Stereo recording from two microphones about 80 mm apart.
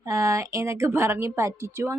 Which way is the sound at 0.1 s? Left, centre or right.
Right.